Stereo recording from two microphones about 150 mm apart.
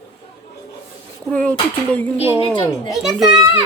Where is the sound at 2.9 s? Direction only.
5° right (ahead or behind).